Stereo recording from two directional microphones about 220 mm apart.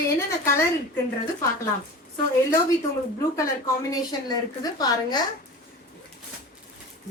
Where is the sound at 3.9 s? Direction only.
15° left (ahead or behind).